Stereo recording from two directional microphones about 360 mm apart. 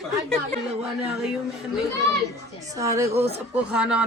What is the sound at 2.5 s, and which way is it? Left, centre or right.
Speech, centre.